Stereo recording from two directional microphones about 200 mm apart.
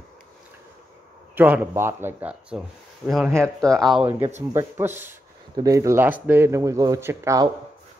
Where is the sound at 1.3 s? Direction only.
10° right (ahead or behind).